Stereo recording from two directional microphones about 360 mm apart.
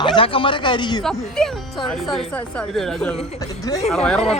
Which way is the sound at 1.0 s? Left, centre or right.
Centre.